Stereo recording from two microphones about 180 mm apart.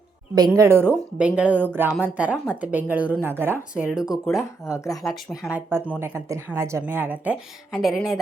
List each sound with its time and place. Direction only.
0.3 s speech: 20° right (ahead or behind); by 4.4 s 5° right (ahead or behind)
4.4 s speech: 15° left (ahead or behind)
5.1 s speech: centre (ahead or behind)
6.0 s speech: 15° right (ahead or behind)
7.7 s speech: centre (ahead or behind)